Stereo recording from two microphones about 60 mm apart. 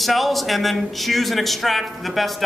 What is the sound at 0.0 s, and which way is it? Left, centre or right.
Speech, centre.